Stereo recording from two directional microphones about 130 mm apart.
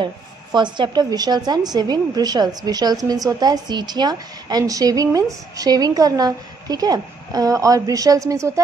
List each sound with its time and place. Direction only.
0.0 s a woman's voice: 35° right (ahead or behind)